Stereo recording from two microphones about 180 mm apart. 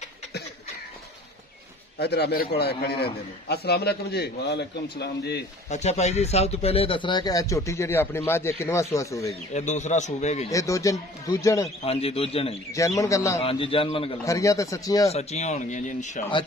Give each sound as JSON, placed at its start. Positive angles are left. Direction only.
{"t": 2.0, "sound": "a man's voice", "side_deg": 65}
{"t": 5.7, "sound": "speech", "side_deg": 40}
{"t": 9.5, "sound": "speech", "side_deg": 40}
{"t": 10.5, "sound": "speech", "side_deg": 15}
{"t": 11.8, "sound": "speech", "side_deg": 35}
{"t": 12.7, "sound": "speech", "side_deg": 20}
{"t": 13.4, "sound": "speech", "side_deg": 30}
{"t": 14.2, "sound": "speech", "side_deg": 15}
{"t": 15.0, "sound": "speech", "side_deg": 35}